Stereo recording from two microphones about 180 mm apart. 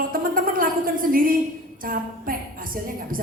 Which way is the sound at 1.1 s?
50° right (ahead or behind).